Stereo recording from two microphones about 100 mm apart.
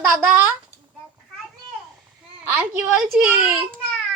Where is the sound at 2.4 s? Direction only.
15° right (ahead or behind).